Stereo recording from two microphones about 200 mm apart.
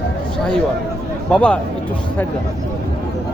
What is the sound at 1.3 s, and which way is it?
Speech, 5° left (ahead or behind).